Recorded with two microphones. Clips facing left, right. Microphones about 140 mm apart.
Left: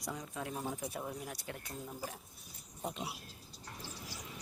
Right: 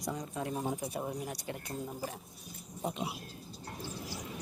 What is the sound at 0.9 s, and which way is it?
Speech, 25° right (ahead or behind).